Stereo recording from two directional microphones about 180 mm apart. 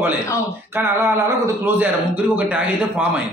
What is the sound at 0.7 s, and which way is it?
A man's voice, 15° right (ahead or behind).